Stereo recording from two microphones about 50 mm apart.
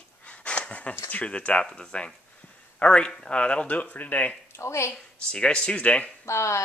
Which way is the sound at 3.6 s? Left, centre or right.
Left.